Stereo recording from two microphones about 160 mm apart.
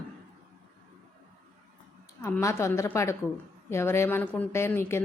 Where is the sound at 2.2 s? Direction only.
15° left (ahead or behind).